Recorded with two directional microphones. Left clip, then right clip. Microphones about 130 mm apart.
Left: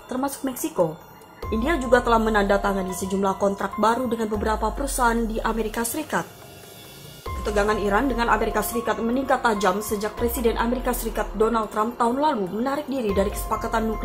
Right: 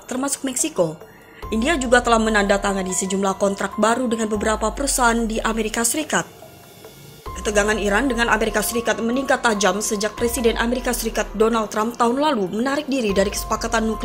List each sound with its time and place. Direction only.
0.1 s a woman's voice: 15° right (ahead or behind)
7.4 s a woman's voice: 20° right (ahead or behind)